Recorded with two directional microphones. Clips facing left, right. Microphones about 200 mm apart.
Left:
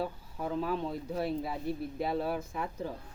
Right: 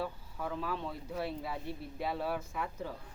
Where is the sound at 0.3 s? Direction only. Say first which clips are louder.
Left 5 dB; 25° left (ahead or behind).